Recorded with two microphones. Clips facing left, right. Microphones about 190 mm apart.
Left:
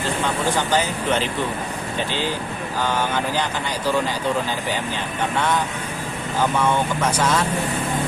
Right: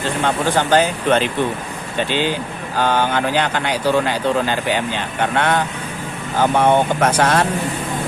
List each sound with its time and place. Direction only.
0.3 s speech: 60° right (ahead or behind)
2.7 s speech: 65° right (ahead or behind)